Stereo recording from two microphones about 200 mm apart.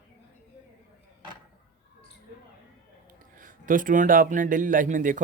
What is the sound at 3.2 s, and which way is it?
Speech, 40° right (ahead or behind).